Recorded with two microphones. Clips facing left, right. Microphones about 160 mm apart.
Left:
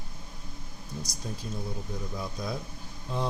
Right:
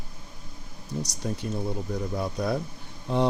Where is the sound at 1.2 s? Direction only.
65° right (ahead or behind).